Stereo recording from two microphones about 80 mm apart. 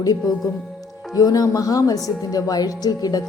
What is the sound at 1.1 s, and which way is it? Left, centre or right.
A woman's voice, left.